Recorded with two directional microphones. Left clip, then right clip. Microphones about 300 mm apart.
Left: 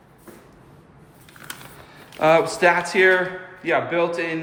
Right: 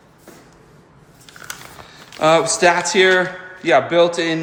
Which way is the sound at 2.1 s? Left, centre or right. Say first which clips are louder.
Right 2 dB; centre.